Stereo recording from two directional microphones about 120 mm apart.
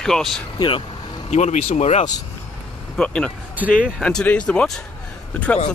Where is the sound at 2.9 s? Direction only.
10° left (ahead or behind).